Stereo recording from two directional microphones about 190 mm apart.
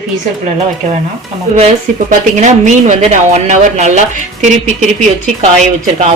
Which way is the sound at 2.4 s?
40° right (ahead or behind).